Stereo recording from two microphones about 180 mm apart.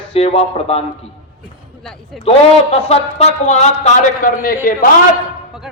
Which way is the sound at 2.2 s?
35° left (ahead or behind).